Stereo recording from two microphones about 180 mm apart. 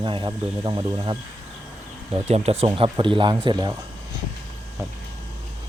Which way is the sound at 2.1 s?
35° right (ahead or behind).